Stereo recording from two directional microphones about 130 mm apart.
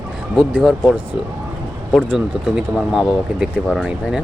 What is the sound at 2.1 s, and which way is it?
Speech, 5° right (ahead or behind).